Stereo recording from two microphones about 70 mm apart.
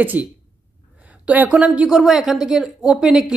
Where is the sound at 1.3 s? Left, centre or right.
Right.